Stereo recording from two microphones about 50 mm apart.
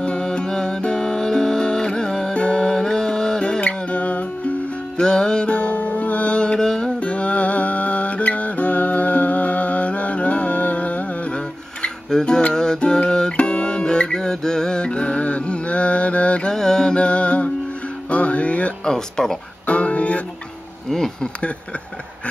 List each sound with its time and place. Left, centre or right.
0.0 s music: centre
3.6 s music: left
4.9 s music: centre
7.0 s music: left
11.3 s music: centre
16.5 s music: centre; by 18.7 s left
18.9 s speech: centre
19.6 s music: left
20.9 s speech: centre